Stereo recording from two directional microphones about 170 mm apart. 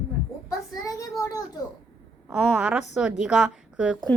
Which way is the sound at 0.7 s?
20° left (ahead or behind).